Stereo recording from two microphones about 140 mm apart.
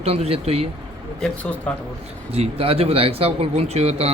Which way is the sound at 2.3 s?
45° right (ahead or behind).